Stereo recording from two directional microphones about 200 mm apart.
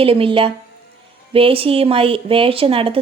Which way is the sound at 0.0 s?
25° right (ahead or behind).